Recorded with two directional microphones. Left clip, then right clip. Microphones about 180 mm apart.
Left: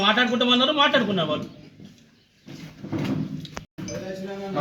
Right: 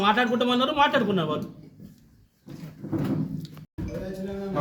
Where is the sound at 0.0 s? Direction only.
30° right (ahead or behind).